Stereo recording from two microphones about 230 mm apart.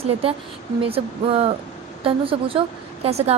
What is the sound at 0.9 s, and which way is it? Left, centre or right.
Speech, right.